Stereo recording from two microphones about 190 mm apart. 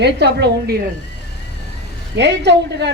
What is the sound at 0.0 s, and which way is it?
Speech, 60° right (ahead or behind).